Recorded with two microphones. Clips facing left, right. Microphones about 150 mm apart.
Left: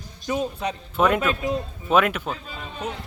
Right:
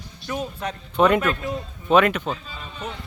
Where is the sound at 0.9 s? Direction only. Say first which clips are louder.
Right 3 dB; 5° left (ahead or behind).